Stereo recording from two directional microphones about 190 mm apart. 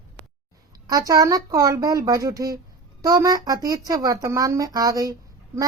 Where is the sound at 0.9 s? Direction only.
20° right (ahead or behind).